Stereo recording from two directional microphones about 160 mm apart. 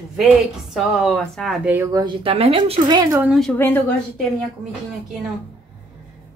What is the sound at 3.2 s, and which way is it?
Speech, centre (ahead or behind).